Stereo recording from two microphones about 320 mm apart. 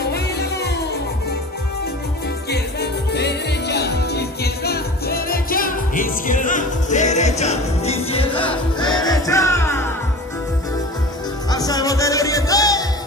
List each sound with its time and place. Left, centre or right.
0.0 s music: left
2.5 s music: left; by 9.8 s centre
11.5 s music: centre